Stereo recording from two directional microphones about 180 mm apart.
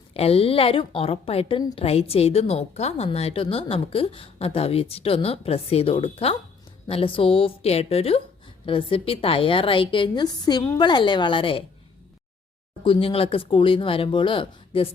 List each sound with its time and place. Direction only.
0.1 s a woman's voice: 35° left (ahead or behind)
12.8 s a woman's voice: 30° left (ahead or behind)